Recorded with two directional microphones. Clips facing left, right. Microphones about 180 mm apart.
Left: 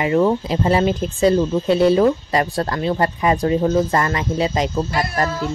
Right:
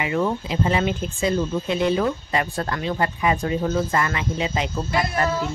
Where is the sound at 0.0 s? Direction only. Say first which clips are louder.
Left 6 dB; 40° left (ahead or behind).